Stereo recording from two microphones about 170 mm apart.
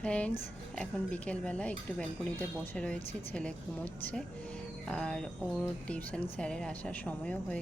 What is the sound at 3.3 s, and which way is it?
Speech, 5° left (ahead or behind).